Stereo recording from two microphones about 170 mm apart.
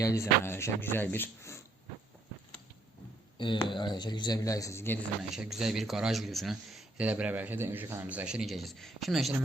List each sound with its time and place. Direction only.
0.0 s speech: 15° left (ahead or behind)
3.3 s speech: 30° left (ahead or behind)
5.3 s speech: centre (ahead or behind)